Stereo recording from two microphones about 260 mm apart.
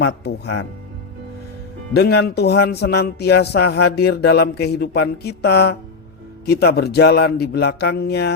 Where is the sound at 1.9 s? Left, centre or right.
Left.